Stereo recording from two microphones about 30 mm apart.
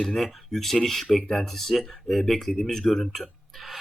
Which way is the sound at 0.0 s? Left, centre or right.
Centre.